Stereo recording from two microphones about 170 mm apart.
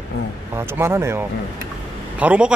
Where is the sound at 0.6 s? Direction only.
15° right (ahead or behind).